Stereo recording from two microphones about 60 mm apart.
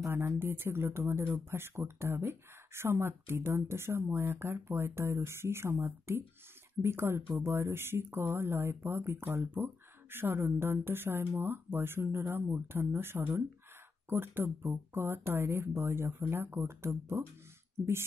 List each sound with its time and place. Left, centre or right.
0.1 s speech: right